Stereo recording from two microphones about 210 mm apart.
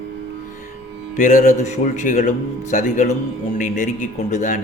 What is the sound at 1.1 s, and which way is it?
A man's voice, 40° left (ahead or behind).